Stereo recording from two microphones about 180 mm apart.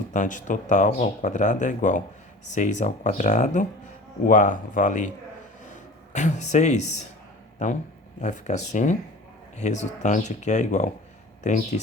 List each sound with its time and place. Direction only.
0.1 s speech: 45° left (ahead or behind)
6.1 s speech: 40° left (ahead or behind)